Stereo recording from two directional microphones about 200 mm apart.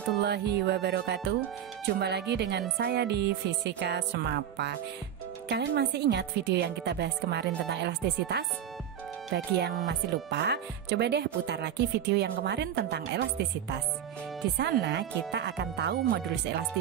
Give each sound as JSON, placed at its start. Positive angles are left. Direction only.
{"t": 0.2, "sound": "speech", "side_deg": -55}
{"t": 14.6, "sound": "speech", "side_deg": -55}